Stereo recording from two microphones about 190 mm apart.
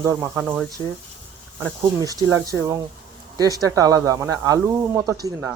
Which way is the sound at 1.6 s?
15° right (ahead or behind).